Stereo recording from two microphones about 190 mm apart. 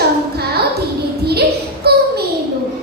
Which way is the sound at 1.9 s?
55° right (ahead or behind).